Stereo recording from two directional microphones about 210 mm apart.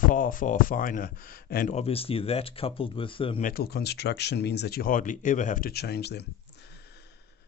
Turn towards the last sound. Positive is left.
turn(degrees=50)  # may be behind; listen again after turning